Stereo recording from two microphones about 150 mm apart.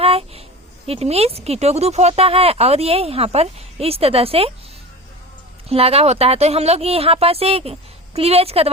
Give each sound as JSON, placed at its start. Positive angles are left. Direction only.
{"t": 0.0, "sound": "a sound", "side_deg": -40}
{"t": 0.9, "sound": "speech", "side_deg": -45}
{"t": 5.6, "sound": "speech", "side_deg": -40}